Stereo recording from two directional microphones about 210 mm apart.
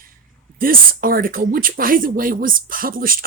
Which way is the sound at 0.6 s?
45° right (ahead or behind).